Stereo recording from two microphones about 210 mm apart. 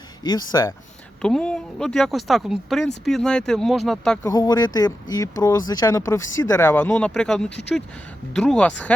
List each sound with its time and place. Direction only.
0.3 s speech: 20° left (ahead or behind)
1.2 s speech: 5° left (ahead or behind)
4.3 s speech: 15° left (ahead or behind)